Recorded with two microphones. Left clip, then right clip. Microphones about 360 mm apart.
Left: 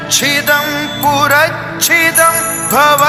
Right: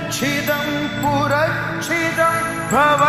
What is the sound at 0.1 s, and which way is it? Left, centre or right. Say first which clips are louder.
Music: left 10 dB; left.